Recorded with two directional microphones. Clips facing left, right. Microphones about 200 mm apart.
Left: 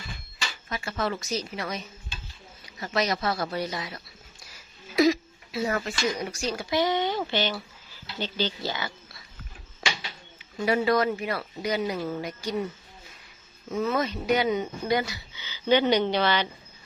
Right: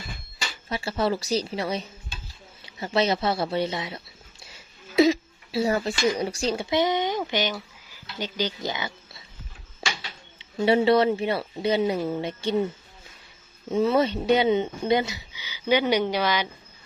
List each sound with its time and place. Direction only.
0.7 s speech: 30° right (ahead or behind)
10.3 s speech: 25° right (ahead or behind)
13.7 s speech: 30° right (ahead or behind); by 16.5 s 10° right (ahead or behind)